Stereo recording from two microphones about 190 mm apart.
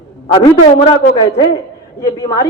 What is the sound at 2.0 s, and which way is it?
Speech, 20° left (ahead or behind).